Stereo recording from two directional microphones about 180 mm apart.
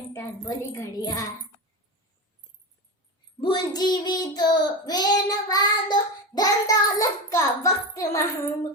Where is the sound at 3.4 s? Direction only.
25° left (ahead or behind).